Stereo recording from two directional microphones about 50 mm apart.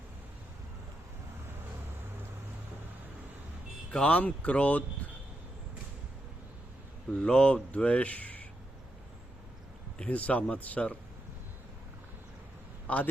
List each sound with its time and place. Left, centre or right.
3.9 s speech: left
7.1 s speech: centre
10.0 s speech: left
12.9 s speech: left